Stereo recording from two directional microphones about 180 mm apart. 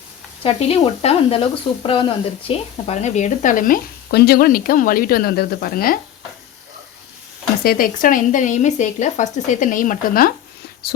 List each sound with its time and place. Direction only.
0.4 s speech: 35° left (ahead or behind); by 6.0 s 55° left (ahead or behind)
7.6 s speech: 55° left (ahead or behind)